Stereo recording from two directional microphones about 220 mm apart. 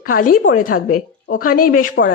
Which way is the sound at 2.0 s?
55° left (ahead or behind).